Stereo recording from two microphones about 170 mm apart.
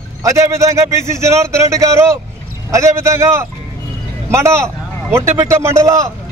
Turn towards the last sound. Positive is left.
turn(degrees=-15)  # may be behind; listen again after turning